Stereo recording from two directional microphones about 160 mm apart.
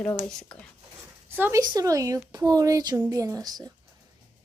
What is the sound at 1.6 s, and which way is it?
Speech, 20° right (ahead or behind).